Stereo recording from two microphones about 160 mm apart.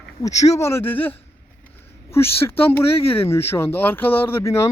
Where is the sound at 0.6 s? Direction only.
15° left (ahead or behind).